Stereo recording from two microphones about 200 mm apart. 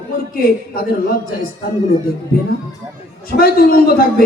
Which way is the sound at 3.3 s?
50° left (ahead or behind).